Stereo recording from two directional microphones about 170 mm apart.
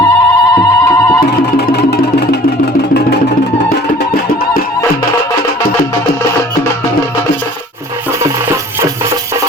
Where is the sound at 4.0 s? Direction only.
65° left (ahead or behind).